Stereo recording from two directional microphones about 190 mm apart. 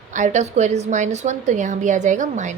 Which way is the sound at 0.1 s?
40° right (ahead or behind).